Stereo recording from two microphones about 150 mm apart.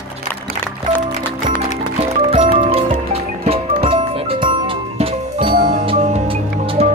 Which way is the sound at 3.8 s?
40° right (ahead or behind).